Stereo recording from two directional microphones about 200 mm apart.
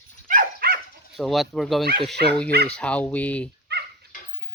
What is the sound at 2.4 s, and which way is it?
Speech, 55° right (ahead or behind).